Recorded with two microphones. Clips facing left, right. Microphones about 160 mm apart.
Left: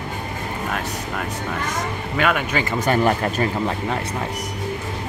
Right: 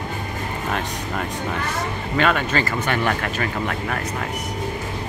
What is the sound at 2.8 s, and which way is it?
Speech, 35° left (ahead or behind).